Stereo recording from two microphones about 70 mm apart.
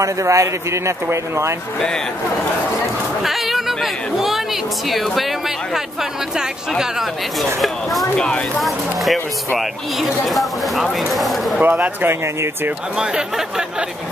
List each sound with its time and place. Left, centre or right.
0.0 s a man's voice: right
3.2 s speech: centre
6.8 s speech: centre
8.2 s speech: centre
8.5 s speech: centre
11.6 s speech: right
12.1 s speech: right
12.9 s speech: centre